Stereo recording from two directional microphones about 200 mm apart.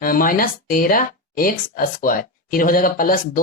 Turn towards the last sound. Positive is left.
turn(degrees=45)  # may be behind; listen again after turning